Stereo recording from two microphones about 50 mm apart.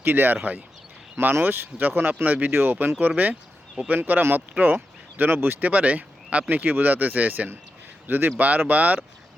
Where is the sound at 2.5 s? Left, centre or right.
Right.